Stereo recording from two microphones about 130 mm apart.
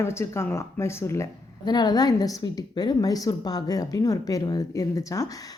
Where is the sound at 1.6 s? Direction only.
30° left (ahead or behind).